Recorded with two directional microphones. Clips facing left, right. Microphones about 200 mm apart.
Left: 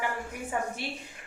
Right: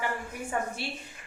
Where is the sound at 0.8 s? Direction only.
15° left (ahead or behind).